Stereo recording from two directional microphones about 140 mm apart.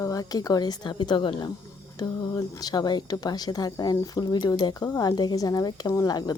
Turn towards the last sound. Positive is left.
turn(degrees=30)  # may be behind; listen again after turning